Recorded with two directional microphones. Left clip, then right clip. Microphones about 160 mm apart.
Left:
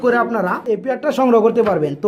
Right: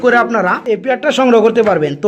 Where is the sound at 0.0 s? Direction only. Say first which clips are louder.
Right 5 dB; 5° right (ahead or behind).